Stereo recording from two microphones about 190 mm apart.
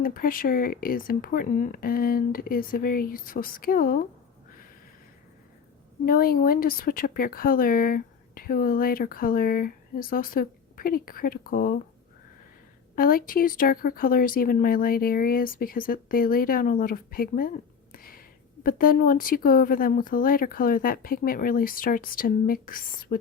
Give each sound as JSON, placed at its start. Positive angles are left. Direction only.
{"t": 0.0, "sound": "speech", "side_deg": 50}
{"t": 6.1, "sound": "speech", "side_deg": 50}
{"t": 13.0, "sound": "speech", "side_deg": 50}